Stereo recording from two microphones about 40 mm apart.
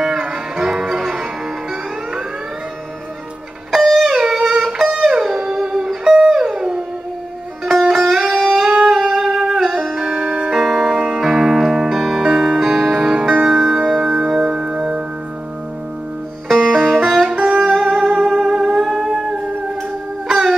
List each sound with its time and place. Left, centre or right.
0.0 s music: centre
3.7 s music: centre
4.1 s music: centre
7.9 s music: centre
8.3 s music: centre
8.9 s music: centre
10.0 s music: centre
16.4 s music: centre
17.7 s music: centre
18.0 s music: centre
20.2 s a sound: centre